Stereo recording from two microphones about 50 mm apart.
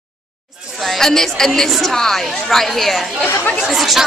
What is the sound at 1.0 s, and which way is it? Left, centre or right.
A woman's voice, centre.